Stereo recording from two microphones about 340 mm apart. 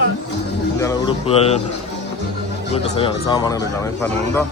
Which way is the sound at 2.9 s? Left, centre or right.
Centre.